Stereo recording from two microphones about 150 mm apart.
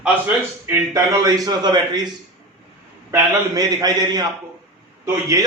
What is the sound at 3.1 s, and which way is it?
A man's voice, 25° right (ahead or behind).